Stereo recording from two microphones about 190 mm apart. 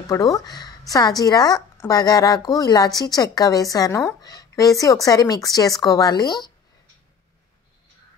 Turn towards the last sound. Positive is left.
turn(degrees=20)  # may be behind; listen again after turning